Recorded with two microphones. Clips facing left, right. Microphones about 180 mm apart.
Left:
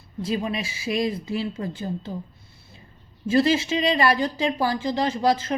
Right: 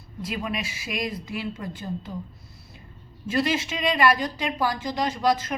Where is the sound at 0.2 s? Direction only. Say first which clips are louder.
Left 4 dB; 30° left (ahead or behind).